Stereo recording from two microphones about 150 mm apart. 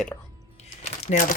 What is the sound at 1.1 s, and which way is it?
Speech, 60° left (ahead or behind).